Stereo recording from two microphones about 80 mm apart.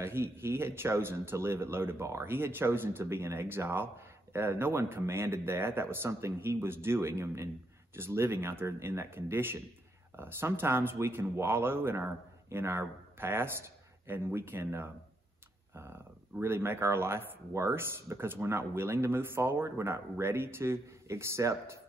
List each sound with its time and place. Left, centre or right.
0.0 s speech: right